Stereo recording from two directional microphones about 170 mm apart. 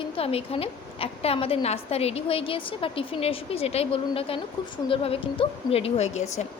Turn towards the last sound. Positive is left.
turn(degrees=40)  # may be behind; listen again after turning